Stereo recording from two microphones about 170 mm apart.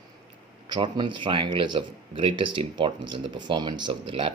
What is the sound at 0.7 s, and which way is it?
Speech, 25° right (ahead or behind).